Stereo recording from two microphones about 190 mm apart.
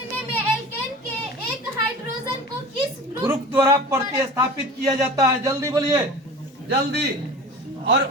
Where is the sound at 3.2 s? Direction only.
15° right (ahead or behind).